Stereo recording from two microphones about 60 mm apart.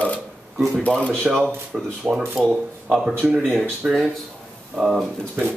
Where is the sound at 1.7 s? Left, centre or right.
Centre.